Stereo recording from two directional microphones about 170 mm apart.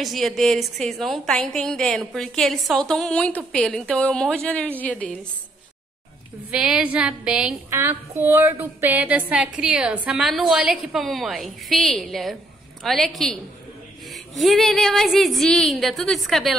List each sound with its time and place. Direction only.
0.0 s a woman's voice: centre (ahead or behind)
6.5 s a woman's voice: 5° right (ahead or behind)